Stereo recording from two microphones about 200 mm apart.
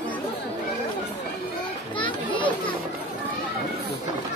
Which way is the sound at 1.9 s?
25° left (ahead or behind).